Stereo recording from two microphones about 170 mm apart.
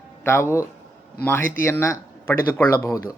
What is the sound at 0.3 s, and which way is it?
Speech, 15° left (ahead or behind).